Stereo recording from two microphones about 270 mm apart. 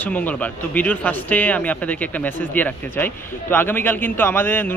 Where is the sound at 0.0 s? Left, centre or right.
Centre.